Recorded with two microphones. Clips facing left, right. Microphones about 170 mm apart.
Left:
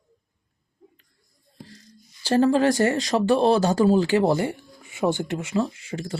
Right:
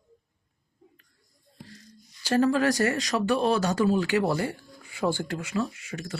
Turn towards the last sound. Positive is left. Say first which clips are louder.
# left 4 dB
turn(degrees=30)  # may be behind; listen again after turning